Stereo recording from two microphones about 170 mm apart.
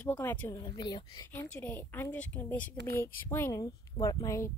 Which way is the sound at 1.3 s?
10° left (ahead or behind).